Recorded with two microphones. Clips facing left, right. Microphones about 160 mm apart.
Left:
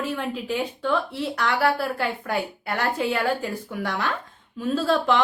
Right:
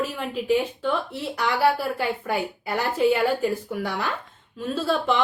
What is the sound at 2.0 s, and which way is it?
A woman's voice, 5° right (ahead or behind).